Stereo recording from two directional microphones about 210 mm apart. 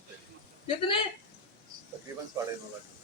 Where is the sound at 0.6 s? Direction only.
25° left (ahead or behind).